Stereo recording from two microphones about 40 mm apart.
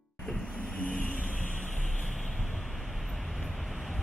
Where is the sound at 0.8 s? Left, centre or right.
Left.